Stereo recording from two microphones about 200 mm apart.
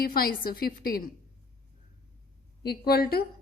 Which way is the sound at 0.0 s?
50° left (ahead or behind).